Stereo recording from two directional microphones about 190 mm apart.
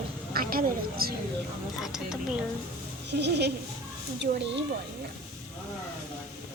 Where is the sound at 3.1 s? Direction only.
60° right (ahead or behind).